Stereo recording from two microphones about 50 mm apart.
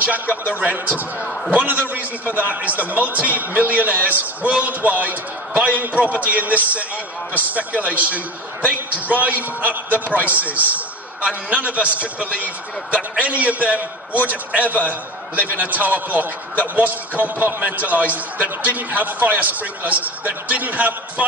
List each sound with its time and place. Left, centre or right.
0.5 s a man's voice: right
9.2 s a man's voice: right